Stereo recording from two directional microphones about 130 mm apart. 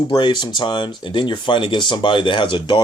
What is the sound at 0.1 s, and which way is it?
Speech, 35° left (ahead or behind).